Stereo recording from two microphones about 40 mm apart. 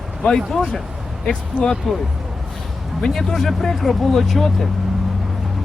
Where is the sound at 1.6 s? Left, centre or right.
Left.